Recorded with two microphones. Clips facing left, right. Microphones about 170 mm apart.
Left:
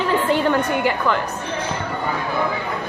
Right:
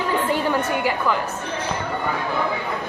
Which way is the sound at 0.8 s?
5° right (ahead or behind).